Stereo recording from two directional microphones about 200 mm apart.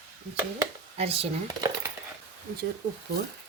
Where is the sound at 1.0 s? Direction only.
30° right (ahead or behind).